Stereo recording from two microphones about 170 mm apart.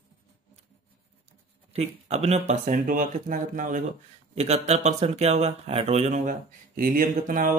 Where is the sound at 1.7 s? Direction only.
40° right (ahead or behind).